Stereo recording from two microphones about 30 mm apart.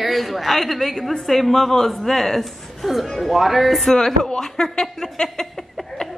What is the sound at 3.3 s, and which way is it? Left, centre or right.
Speech, centre.